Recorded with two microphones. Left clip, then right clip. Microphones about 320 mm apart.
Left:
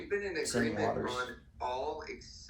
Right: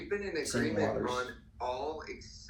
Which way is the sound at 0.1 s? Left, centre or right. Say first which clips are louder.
Even; centre.